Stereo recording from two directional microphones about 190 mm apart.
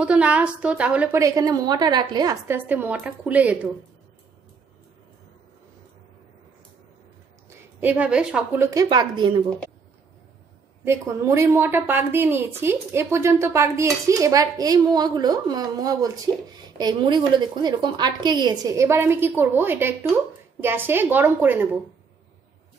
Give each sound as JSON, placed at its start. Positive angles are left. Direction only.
{"t": 0.0, "sound": "a woman's voice", "side_deg": -5}
{"t": 7.4, "sound": "a woman's voice", "side_deg": -10}
{"t": 8.6, "sound": "a woman's voice", "side_deg": -20}
{"t": 10.8, "sound": "a woman's voice", "side_deg": -15}